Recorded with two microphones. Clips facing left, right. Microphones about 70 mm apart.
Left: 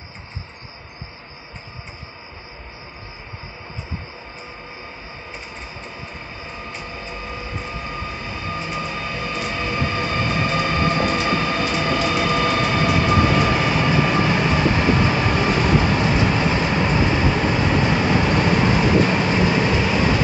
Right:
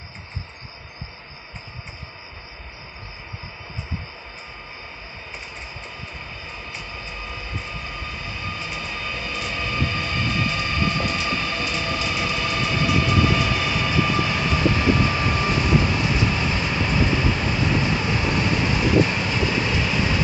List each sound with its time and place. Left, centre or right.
7.9 s vehicle: left